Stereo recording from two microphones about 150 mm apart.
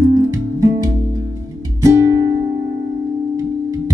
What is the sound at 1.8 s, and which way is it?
Music, 20° right (ahead or behind).